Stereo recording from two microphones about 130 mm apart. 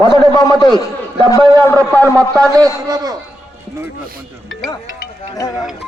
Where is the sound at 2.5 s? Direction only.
30° right (ahead or behind).